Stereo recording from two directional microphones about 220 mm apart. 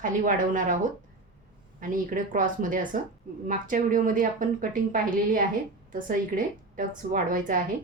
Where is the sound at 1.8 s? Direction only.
40° right (ahead or behind).